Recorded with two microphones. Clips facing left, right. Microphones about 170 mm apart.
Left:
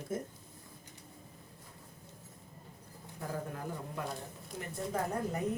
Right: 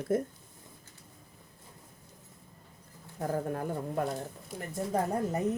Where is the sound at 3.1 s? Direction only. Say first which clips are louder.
Right 8 dB; 50° right (ahead or behind).